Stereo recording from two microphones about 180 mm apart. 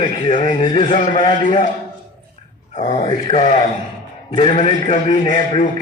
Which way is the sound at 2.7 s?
40° left (ahead or behind).